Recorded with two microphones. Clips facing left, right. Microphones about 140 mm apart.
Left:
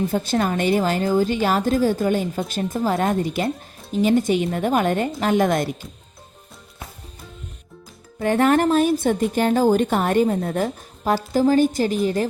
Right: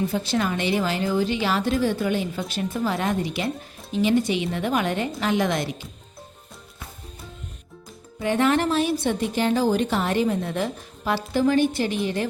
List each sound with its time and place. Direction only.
0.1 s a woman's voice: 45° left (ahead or behind)
8.2 s a woman's voice: 45° left (ahead or behind)